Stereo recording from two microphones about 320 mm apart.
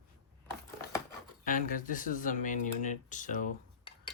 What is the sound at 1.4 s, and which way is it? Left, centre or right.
Speech, left.